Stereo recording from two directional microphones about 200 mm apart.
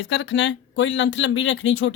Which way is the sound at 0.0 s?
65° left (ahead or behind).